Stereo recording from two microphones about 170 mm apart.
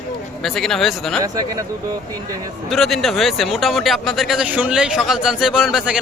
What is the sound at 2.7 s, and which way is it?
A man's voice, centre (ahead or behind).